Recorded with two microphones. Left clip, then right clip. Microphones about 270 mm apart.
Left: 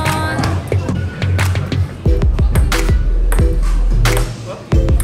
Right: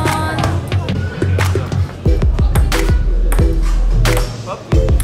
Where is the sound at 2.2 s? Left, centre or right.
Centre.